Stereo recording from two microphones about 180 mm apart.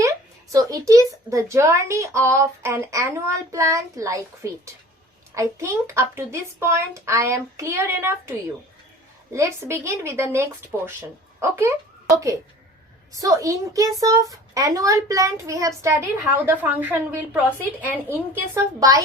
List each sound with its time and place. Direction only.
0.5 s a child's voice: 20° right (ahead or behind)
9.3 s a child's voice: 15° right (ahead or behind)